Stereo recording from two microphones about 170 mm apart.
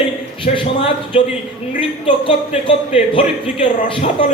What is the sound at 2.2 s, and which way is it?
A man's voice, 30° left (ahead or behind).